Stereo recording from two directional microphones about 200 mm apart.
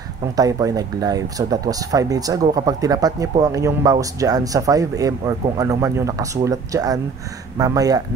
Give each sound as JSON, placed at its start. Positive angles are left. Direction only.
{"t": 0.4, "sound": "speech", "side_deg": -15}